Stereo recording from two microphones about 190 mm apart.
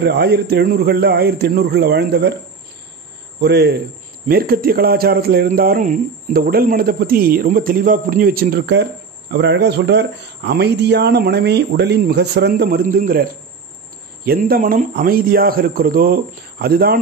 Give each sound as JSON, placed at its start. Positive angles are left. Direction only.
{"t": 0.0, "sound": "speech", "side_deg": -60}
{"t": 3.3, "sound": "speech", "side_deg": -60}